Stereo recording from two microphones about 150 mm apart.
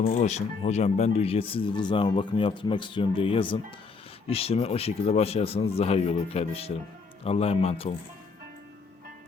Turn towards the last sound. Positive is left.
turn(degrees=40)  # may be behind; listen again after turning